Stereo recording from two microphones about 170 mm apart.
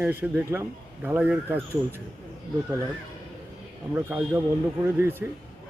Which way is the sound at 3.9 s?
15° right (ahead or behind).